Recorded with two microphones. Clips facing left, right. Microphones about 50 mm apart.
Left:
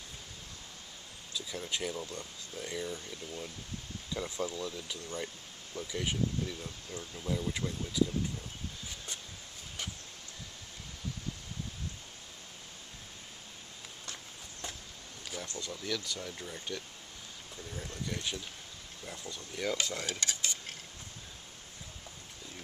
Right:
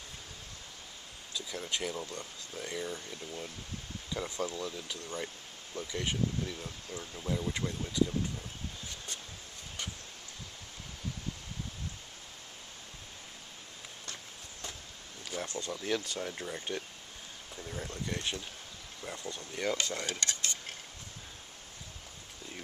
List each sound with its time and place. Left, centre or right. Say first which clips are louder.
1.3 s speech: right 1 dB; centre
15.3 s a sound: right 4 dB; centre
15.6 s speech: right 3 dB; right
19.6 s cutlery: right 1 dB; centre